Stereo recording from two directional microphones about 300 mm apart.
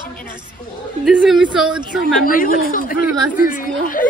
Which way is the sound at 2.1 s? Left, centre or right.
Left.